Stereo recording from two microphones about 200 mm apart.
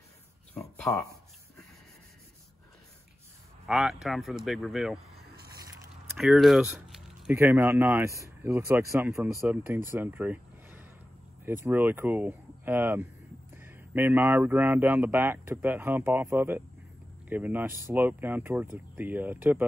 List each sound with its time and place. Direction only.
0.9 s speech: 15° left (ahead or behind)
3.6 s speech: centre (ahead or behind)
6.1 s speech: centre (ahead or behind)
9.8 s a sound: 10° right (ahead or behind)
11.4 s speech: 10° right (ahead or behind)